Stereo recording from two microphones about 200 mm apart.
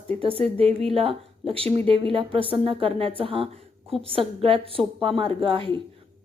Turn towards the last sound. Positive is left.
turn(degrees=-25)  # may be behind; listen again after turning